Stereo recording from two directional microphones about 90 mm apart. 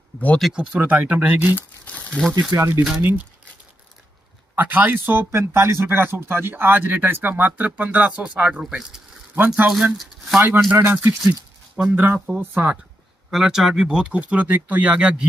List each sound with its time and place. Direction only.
0.6 s speech: 20° right (ahead or behind)
1.5 s speech: 15° left (ahead or behind)
2.5 s speech: 30° right (ahead or behind)
4.6 s speech: 20° right (ahead or behind); by 9.0 s 5° right (ahead or behind)
9.3 s speech: 20° right (ahead or behind)
11.2 s a sound: 10° right (ahead or behind)
12.4 s speech: 25° right (ahead or behind)
13.3 s speech: 5° right (ahead or behind)